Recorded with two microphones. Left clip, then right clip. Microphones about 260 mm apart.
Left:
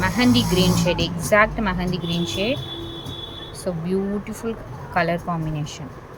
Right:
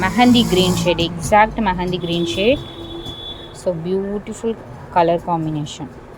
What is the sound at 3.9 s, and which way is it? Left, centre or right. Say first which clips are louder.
Speech: right 3 dB; centre.